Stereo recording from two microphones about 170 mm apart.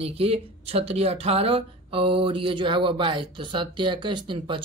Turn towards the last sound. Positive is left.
turn(degrees=-25)  # may be behind; listen again after turning